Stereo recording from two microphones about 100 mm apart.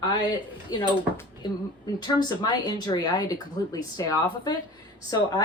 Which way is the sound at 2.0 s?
45° left (ahead or behind).